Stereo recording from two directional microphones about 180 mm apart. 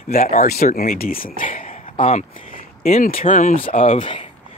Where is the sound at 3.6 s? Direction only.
35° left (ahead or behind).